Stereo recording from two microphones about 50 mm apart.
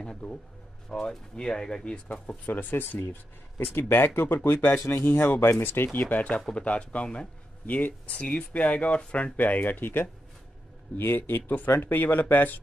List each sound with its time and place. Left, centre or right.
0.0 s speech: centre
2.4 s speech: left
5.9 s speech: left